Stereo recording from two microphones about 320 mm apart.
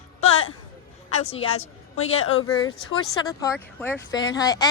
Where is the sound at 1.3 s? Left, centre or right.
Centre.